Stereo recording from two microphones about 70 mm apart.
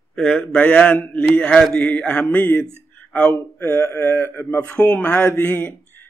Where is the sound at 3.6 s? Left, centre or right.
Left.